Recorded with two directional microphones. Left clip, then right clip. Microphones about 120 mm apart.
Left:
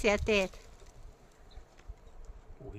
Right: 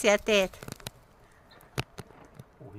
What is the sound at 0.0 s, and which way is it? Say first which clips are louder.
Speech: right 5 dB; 30° right (ahead or behind).